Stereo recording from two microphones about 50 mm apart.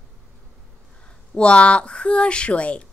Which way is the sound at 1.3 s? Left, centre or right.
Left.